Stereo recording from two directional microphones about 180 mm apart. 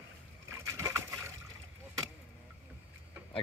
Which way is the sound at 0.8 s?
15° right (ahead or behind).